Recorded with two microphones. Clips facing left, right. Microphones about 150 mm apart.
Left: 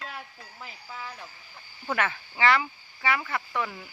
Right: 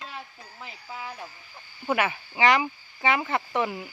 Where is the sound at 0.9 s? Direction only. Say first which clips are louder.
Right 4 dB; 20° right (ahead or behind).